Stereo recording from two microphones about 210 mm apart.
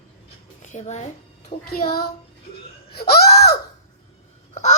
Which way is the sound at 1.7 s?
45° left (ahead or behind).